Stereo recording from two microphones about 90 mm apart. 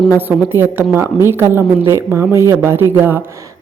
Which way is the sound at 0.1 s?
20° right (ahead or behind).